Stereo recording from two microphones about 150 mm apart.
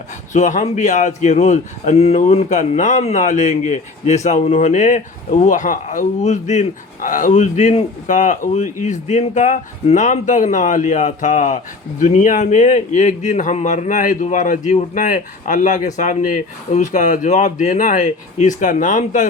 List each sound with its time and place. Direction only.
0.3 s speech: 55° left (ahead or behind)